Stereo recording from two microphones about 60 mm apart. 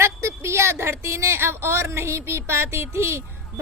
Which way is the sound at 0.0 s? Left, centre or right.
Right.